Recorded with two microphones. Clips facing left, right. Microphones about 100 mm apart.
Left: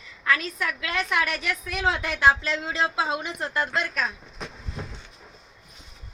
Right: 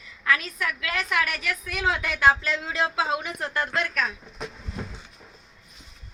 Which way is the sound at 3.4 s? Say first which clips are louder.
Left 1 dB; 30° left (ahead or behind).